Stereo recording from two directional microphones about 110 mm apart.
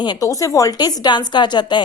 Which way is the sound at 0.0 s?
40° left (ahead or behind).